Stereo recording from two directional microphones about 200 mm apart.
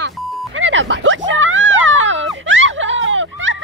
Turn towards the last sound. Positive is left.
turn(degrees=-70)  # may be behind; listen again after turning